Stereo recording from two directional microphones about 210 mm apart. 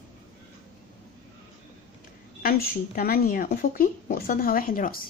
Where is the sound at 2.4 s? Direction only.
45° left (ahead or behind).